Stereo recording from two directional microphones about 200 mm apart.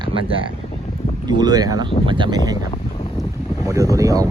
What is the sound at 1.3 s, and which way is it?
Speech, 20° right (ahead or behind).